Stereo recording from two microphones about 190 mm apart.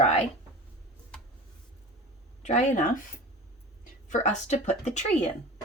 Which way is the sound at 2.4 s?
40° left (ahead or behind).